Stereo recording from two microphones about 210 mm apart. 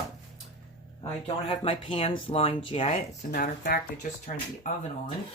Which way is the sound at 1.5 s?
25° left (ahead or behind).